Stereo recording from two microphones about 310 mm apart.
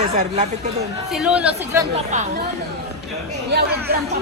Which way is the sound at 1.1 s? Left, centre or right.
Centre.